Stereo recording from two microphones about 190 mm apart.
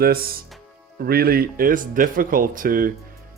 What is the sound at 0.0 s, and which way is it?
Speech, 50° right (ahead or behind).